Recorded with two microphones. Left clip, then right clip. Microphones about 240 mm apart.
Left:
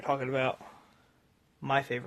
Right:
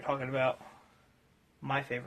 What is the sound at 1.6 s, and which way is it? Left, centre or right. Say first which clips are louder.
Speech: left 4 dB; left.